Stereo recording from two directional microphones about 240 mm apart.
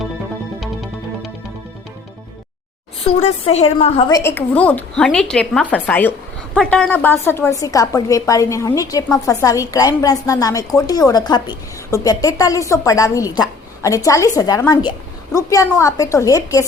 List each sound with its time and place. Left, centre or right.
3.0 s a woman's voice: left
4.2 s a woman's voice: centre